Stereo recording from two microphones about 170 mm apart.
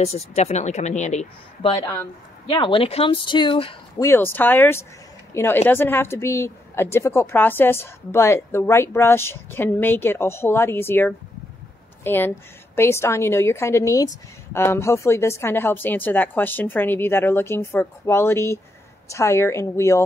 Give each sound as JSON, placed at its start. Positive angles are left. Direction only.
{"t": 0.0, "sound": "speech", "side_deg": 35}
{"t": 4.0, "sound": "a woman's voice", "side_deg": 15}